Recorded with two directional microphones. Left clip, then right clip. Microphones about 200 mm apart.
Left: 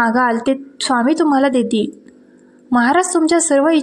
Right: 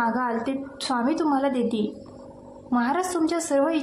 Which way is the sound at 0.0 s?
35° left (ahead or behind).